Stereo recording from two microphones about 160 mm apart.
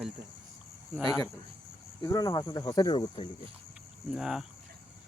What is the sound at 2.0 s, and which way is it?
Speech, 20° left (ahead or behind).